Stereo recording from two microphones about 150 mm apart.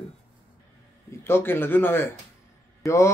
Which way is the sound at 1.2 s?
15° left (ahead or behind).